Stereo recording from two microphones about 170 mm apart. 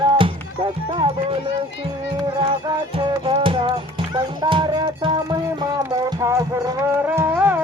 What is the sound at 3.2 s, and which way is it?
Music, 30° right (ahead or behind).